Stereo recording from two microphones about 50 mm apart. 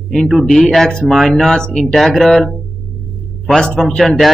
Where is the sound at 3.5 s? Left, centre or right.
Centre.